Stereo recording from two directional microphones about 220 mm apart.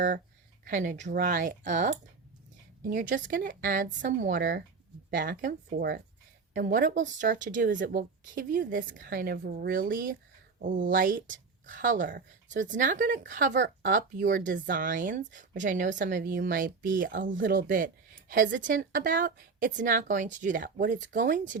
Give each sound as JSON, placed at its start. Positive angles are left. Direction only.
{"t": 0.6, "sound": "speech", "side_deg": -35}